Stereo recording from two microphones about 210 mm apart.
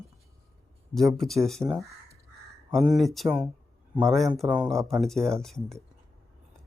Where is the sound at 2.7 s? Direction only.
Centre (ahead or behind).